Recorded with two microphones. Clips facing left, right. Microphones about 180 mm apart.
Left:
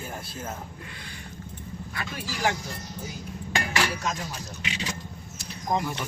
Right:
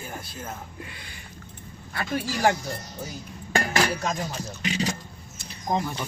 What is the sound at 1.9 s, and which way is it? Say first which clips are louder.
Speech: right 8 dB; 50° right (ahead or behind).